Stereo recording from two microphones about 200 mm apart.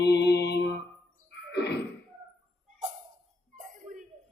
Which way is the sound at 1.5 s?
55° left (ahead or behind).